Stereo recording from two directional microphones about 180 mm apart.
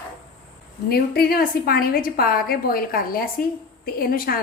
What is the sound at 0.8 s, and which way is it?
A woman's voice, 60° left (ahead or behind).